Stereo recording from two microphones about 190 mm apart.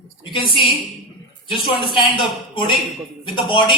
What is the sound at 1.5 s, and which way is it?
Speech, 25° left (ahead or behind).